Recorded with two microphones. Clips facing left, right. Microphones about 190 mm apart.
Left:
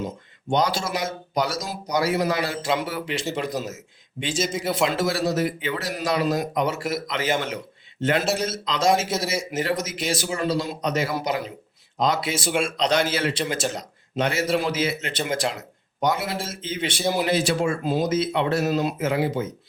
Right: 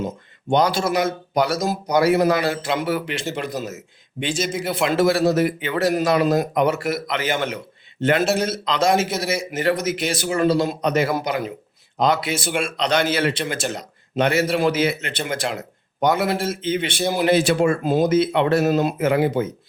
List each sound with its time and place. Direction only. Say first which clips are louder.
0.5 s a man's voice: right 5 dB; 55° right (ahead or behind)